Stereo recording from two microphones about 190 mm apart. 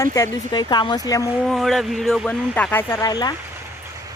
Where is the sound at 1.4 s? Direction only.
Centre (ahead or behind); by 3.3 s 20° left (ahead or behind).